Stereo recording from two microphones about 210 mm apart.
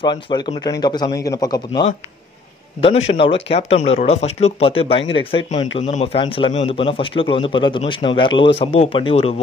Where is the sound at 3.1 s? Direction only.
35° left (ahead or behind).